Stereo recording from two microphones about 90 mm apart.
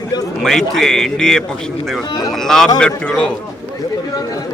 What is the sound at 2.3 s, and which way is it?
A man's voice, 5° left (ahead or behind).